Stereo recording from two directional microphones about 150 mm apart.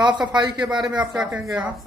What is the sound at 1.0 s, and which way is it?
Speech, 5° right (ahead or behind).